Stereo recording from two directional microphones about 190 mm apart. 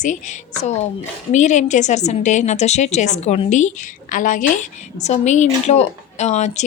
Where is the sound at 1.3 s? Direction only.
40° left (ahead or behind).